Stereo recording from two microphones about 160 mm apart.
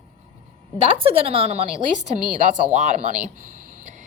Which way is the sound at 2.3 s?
50° right (ahead or behind).